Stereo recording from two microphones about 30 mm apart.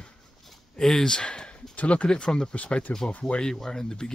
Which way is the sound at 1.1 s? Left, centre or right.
Left.